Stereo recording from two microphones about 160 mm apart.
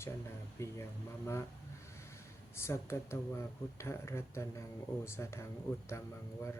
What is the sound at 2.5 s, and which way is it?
Speech, 15° left (ahead or behind).